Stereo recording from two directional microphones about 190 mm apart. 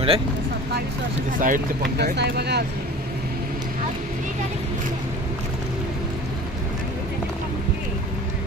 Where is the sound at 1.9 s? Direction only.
60° right (ahead or behind).